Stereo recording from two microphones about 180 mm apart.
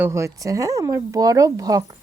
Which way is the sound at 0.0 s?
15° right (ahead or behind).